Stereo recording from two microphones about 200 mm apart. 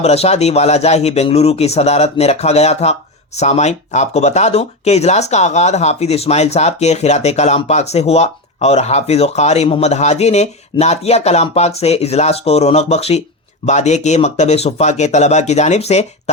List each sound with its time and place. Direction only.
0.0 s speech: 30° left (ahead or behind)